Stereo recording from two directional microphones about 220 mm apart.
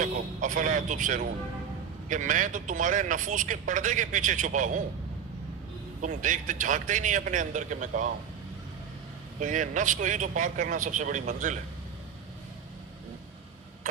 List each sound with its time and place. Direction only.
0.0 s a man's voice: 35° right (ahead or behind)
6.0 s a man's voice: 35° right (ahead or behind)
9.4 s a man's voice: 35° right (ahead or behind)